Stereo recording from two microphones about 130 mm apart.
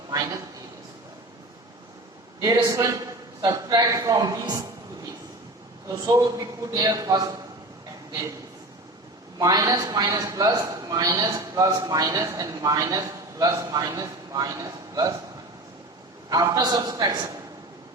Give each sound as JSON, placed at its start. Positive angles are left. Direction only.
{"t": 2.4, "sound": "a man's voice", "side_deg": -25}
{"t": 5.9, "sound": "a man's voice", "side_deg": -25}
{"t": 9.4, "sound": "a man's voice", "side_deg": -25}
{"t": 16.3, "sound": "a man's voice", "side_deg": -25}